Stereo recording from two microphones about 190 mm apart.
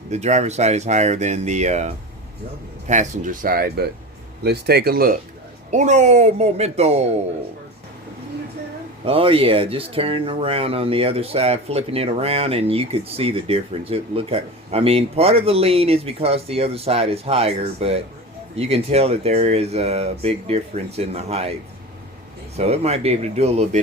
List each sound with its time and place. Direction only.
0.1 s speech: 35° right (ahead or behind); by 5.1 s 55° right (ahead or behind)
5.7 s speech: 40° right (ahead or behind)
9.0 s speech: 30° right (ahead or behind)
22.5 s speech: 35° right (ahead or behind)